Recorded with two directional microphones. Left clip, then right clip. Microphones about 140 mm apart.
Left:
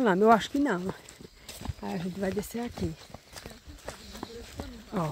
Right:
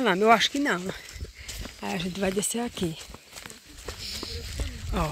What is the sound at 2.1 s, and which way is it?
Speech, 30° right (ahead or behind).